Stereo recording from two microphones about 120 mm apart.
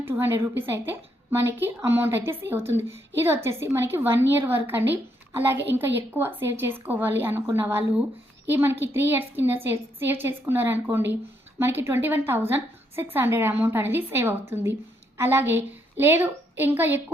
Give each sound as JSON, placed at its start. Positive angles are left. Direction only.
{"t": 0.0, "sound": "a woman's voice", "side_deg": -20}